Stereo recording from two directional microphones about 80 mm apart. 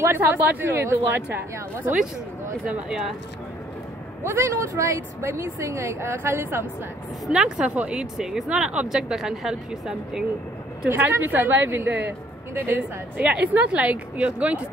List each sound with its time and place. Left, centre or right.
0.0 s speech: right
2.9 s speech: centre
4.2 s speech: right
7.2 s speech: centre
10.9 s speech: right
13.2 s speech: centre